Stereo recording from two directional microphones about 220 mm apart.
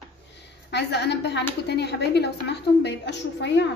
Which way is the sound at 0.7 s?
50° left (ahead or behind).